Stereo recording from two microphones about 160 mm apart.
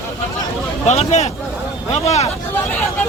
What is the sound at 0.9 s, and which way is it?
Speech, 45° left (ahead or behind).